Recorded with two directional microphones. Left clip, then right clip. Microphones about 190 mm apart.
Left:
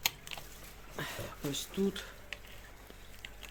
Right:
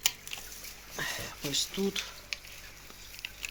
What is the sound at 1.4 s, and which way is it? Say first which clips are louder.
Speech: right 4 dB; 10° left (ahead or behind).